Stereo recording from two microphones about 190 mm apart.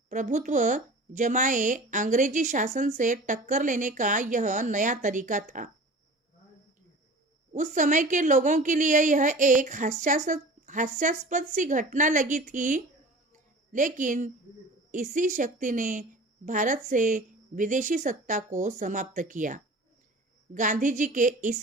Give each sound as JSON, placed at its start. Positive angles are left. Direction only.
{"t": 0.1, "sound": "a woman's voice", "side_deg": -40}
{"t": 7.5, "sound": "a woman's voice", "side_deg": -40}